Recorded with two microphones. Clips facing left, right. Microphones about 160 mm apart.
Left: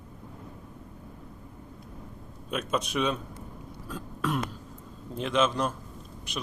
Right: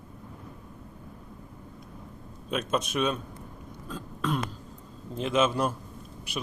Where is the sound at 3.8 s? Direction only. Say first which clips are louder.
Even; 5° left (ahead or behind).